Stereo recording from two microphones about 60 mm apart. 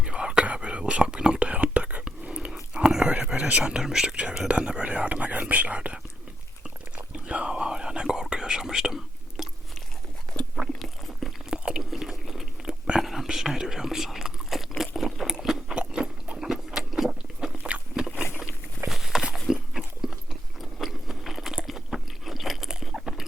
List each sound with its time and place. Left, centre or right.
0.0 s whispering: centre
3.2 s speech: centre
7.1 s whispering: centre
10.3 s biting: left
10.8 s a sound: centre
11.5 s chewing: centre
14.8 s crunch: centre
16.4 s a sound: centre
18.9 s a sound: centre
19.7 s chewing: centre
20.7 s biting: centre
21.7 s a sound: centre